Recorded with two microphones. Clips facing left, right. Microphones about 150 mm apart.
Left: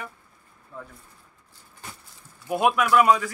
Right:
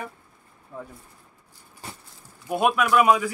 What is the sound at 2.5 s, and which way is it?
Speech, centre (ahead or behind).